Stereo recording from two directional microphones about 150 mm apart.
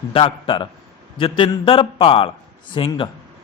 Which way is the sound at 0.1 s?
35° left (ahead or behind).